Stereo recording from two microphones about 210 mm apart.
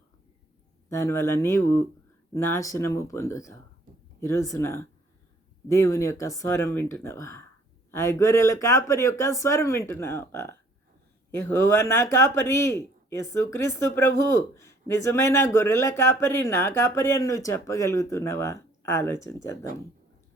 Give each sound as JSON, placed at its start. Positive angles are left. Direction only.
{"t": 0.9, "sound": "speech", "side_deg": 15}